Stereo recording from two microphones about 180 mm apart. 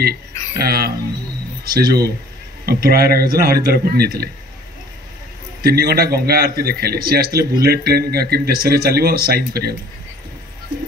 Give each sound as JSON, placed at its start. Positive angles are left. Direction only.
{"t": 0.0, "sound": "speech", "side_deg": -60}
{"t": 5.6, "sound": "speech", "side_deg": -60}